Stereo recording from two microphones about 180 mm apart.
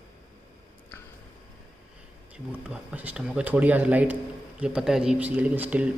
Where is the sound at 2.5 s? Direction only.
10° right (ahead or behind).